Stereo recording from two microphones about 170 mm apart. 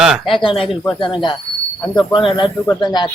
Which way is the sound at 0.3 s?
30° left (ahead or behind).